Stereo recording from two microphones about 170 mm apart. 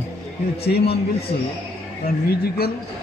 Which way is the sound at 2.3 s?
65° left (ahead or behind).